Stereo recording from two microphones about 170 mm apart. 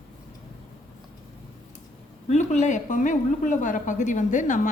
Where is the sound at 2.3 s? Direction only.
45° left (ahead or behind).